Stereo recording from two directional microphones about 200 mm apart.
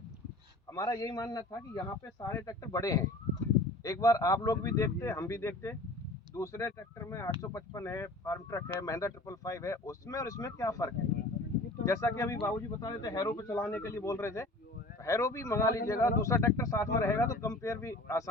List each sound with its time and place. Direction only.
0.7 s a man's voice: 15° left (ahead or behind)